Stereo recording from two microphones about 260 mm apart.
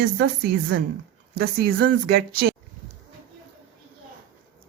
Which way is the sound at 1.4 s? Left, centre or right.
Right.